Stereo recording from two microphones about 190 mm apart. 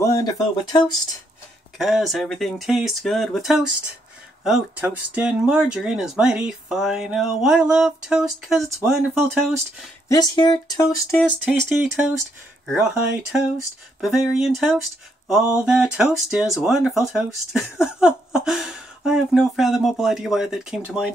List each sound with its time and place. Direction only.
0.0 s speech: 15° left (ahead or behind)
1.8 s speech: centre (ahead or behind)
10.0 s speech: 20° left (ahead or behind)
14.0 s speech: 5° right (ahead or behind)